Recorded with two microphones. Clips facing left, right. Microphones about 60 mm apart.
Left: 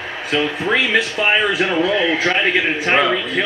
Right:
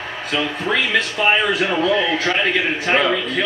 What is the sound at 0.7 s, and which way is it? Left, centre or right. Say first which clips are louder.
Speech: left 2 dB; centre.